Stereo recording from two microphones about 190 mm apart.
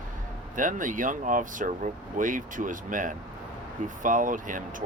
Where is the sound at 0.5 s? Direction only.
45° right (ahead or behind).